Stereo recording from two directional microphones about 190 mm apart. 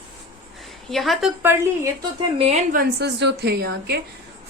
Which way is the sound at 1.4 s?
15° right (ahead or behind).